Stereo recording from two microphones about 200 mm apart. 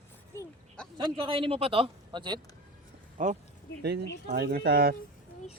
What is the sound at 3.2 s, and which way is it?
Speech, 40° right (ahead or behind).